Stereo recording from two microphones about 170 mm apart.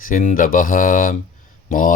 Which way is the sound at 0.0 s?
50° left (ahead or behind).